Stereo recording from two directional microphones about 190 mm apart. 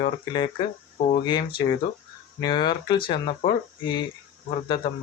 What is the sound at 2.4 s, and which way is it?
Speech, 25° left (ahead or behind).